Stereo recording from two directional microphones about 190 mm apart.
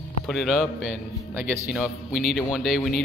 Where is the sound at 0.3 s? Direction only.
Centre (ahead or behind).